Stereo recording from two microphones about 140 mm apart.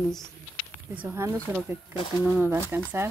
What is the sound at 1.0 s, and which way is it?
Speech, 20° right (ahead or behind).